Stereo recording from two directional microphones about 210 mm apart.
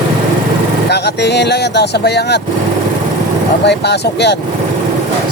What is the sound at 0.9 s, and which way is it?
Speech, 50° left (ahead or behind).